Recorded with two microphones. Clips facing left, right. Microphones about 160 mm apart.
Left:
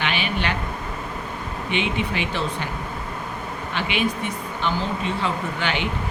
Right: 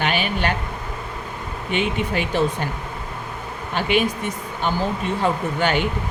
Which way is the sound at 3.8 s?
45° right (ahead or behind).